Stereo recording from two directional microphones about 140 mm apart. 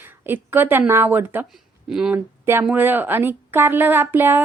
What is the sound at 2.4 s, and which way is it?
A woman's voice, 15° right (ahead or behind).